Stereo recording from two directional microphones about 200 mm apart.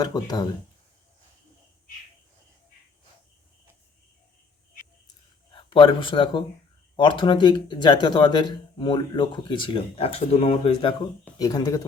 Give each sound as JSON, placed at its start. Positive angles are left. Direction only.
{"t": 0.0, "sound": "speech", "side_deg": 20}
{"t": 5.5, "sound": "a man's voice", "side_deg": 25}